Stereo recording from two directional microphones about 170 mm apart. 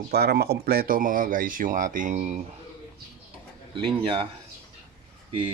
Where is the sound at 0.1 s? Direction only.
70° right (ahead or behind); by 2.4 s 45° right (ahead or behind).